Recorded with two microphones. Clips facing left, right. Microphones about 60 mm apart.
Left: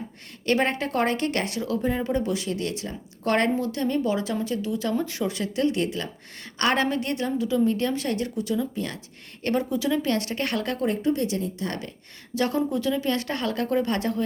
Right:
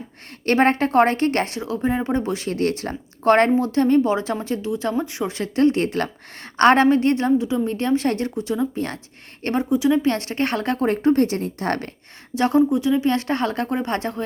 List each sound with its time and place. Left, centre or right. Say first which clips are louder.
0.4 s a woman's voice: right 6 dB; right
5.3 s a woman's voice: right 10 dB; right
10.1 s a woman's voice: right 4 dB; right
12.3 s speech: right 7 dB; right
13.1 s a woman's voice: right 5 dB; right